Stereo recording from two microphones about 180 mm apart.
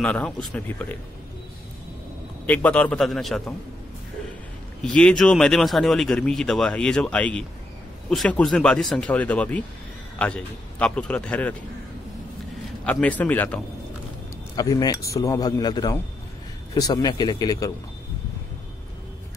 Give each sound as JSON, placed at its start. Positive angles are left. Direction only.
{"t": 0.0, "sound": "a man's voice", "side_deg": 5}
{"t": 2.4, "sound": "speech", "side_deg": 10}
{"t": 4.9, "sound": "a man's voice", "side_deg": 5}
{"t": 12.8, "sound": "a man's voice", "side_deg": 5}
{"t": 14.5, "sound": "a man's voice", "side_deg": 20}